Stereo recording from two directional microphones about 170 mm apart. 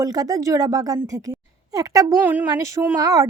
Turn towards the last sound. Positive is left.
turn(degrees=-20)  # may be behind; listen again after turning